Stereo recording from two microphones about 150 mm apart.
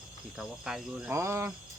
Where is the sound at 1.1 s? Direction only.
15° right (ahead or behind).